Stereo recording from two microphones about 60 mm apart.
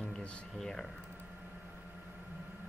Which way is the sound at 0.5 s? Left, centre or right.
Centre.